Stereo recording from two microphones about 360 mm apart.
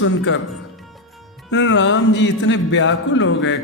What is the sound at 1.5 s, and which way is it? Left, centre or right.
Mantra, left.